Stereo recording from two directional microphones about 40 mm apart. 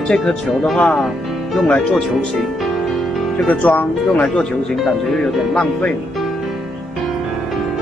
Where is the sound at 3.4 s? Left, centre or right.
Left.